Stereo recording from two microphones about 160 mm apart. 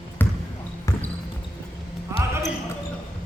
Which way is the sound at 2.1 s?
15° right (ahead or behind).